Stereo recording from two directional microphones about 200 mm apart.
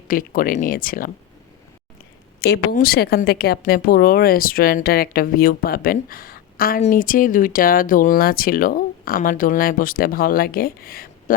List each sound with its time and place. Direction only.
0.1 s speech: 45° left (ahead or behind)
2.4 s speech: 50° left (ahead or behind)